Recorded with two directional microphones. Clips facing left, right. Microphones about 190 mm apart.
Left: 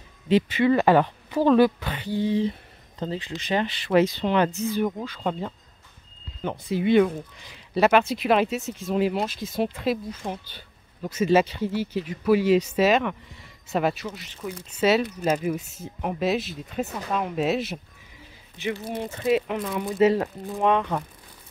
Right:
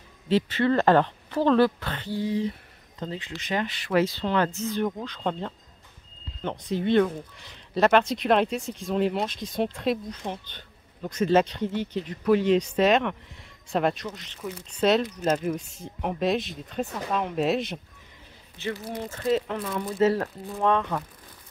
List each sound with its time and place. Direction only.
0.3 s speech: 15° left (ahead or behind)
2.2 s speech: 25° left (ahead or behind); by 17.7 s 5° left (ahead or behind)
18.9 s speech: 15° left (ahead or behind)